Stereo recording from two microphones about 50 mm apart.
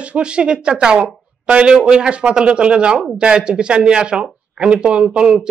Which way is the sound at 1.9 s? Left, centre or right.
Centre.